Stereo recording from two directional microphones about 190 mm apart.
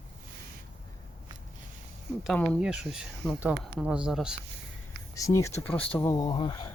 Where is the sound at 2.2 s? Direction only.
5° left (ahead or behind).